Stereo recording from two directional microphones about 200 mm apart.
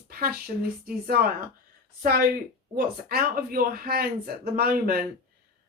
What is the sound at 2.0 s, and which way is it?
A woman's voice, 45° right (ahead or behind).